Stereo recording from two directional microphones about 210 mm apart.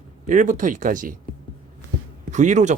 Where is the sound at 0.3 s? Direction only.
40° right (ahead or behind).